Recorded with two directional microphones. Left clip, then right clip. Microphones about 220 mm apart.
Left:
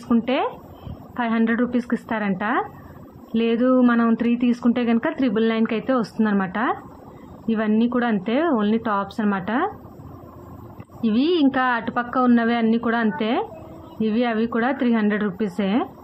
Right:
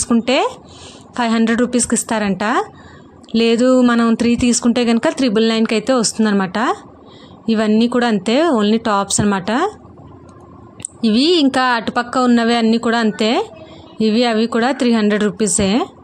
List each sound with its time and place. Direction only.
0.1 s speech: 50° right (ahead or behind)
11.1 s speech: 50° right (ahead or behind)